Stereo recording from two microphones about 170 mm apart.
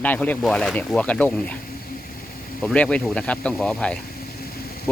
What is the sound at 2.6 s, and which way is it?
Speech, 5° left (ahead or behind).